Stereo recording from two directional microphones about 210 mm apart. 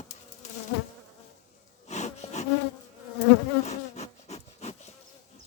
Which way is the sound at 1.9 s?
35° left (ahead or behind).